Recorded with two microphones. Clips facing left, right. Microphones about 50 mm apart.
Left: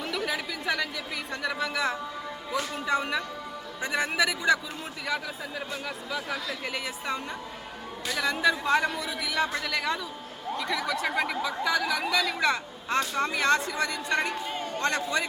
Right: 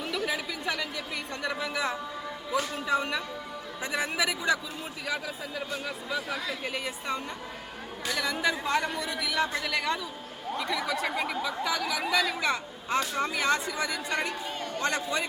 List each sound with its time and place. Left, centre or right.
0.3 s chatter: centre
1.3 s speech: centre
6.3 s speech: centre
14.5 s a sound: left
14.8 s speech: centre